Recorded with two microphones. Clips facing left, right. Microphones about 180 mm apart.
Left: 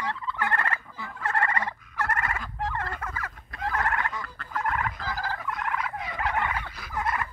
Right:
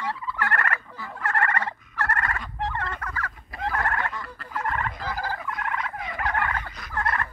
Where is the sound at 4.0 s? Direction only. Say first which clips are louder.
Right 1 dB; centre (ahead or behind).